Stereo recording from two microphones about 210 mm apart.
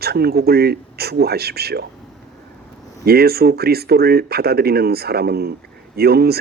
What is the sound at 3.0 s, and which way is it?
Speech, 50° right (ahead or behind).